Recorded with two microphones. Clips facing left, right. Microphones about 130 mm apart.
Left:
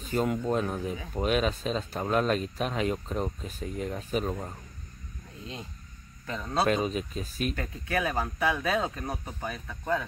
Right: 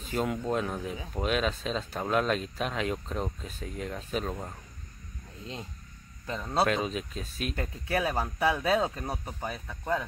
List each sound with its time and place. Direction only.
0.0 s speech: centre (ahead or behind)
6.2 s speech: 15° right (ahead or behind)
6.6 s speech: centre (ahead or behind)
7.5 s speech: 25° right (ahead or behind)